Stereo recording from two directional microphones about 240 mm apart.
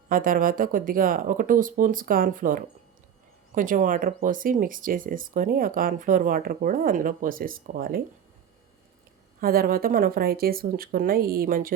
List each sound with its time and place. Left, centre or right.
0.1 s speech: right
9.4 s speech: right